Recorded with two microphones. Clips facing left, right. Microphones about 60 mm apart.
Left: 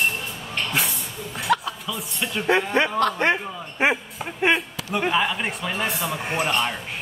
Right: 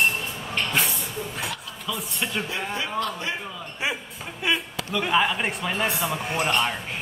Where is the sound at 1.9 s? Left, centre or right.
Centre.